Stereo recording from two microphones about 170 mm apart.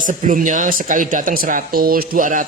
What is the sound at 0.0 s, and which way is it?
A man's voice, 50° right (ahead or behind).